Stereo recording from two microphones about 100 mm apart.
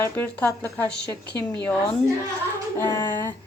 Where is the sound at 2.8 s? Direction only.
30° left (ahead or behind).